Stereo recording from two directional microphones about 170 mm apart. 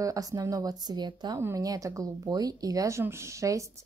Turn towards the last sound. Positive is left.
turn(degrees=-20)  # may be behind; listen again after turning